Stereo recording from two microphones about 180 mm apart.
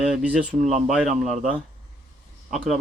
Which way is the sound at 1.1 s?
40° right (ahead or behind).